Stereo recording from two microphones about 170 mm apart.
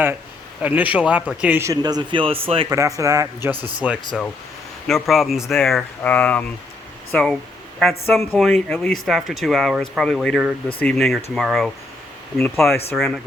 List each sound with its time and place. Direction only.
0.6 s speech: 10° right (ahead or behind); by 2.6 s 35° right (ahead or behind)
2.6 s speech: 20° right (ahead or behind); by 11.7 s centre (ahead or behind)
12.9 s speech: 5° left (ahead or behind)